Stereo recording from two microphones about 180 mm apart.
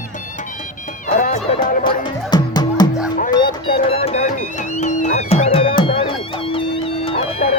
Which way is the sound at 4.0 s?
40° left (ahead or behind).